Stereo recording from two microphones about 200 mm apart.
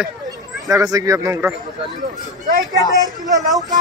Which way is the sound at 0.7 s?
15° right (ahead or behind).